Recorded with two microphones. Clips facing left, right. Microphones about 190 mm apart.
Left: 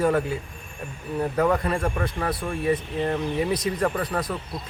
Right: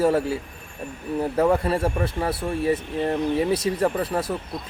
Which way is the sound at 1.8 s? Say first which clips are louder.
Right 2 dB; 30° right (ahead or behind).